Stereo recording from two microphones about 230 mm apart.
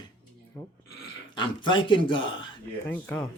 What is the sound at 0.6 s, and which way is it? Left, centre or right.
Speech, centre.